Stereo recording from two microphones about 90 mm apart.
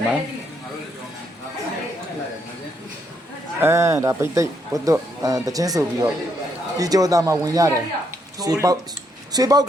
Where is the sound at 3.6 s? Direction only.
30° right (ahead or behind).